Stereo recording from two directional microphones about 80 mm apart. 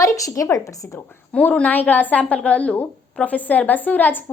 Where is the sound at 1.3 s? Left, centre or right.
Centre.